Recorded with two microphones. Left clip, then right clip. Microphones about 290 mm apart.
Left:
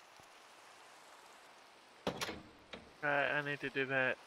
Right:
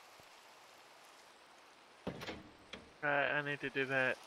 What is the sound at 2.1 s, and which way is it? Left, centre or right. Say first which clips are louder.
Door: left 6 dB; left.